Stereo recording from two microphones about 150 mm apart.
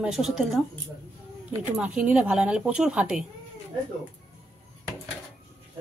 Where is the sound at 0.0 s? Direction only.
5° right (ahead or behind).